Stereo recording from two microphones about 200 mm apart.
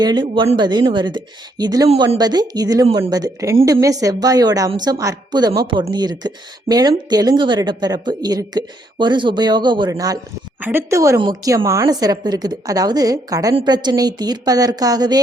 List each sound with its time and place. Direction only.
0.0 s a woman's voice: 20° right (ahead or behind)